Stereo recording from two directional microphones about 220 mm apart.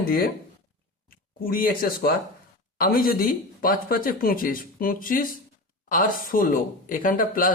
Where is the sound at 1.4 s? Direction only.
40° left (ahead or behind).